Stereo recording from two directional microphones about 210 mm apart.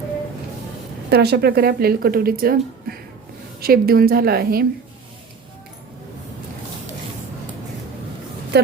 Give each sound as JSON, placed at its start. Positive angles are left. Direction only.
{"t": 1.1, "sound": "speech", "side_deg": -50}
{"t": 8.5, "sound": "speech", "side_deg": -50}